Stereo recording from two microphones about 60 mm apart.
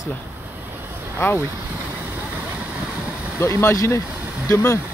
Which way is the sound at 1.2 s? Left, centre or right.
Left.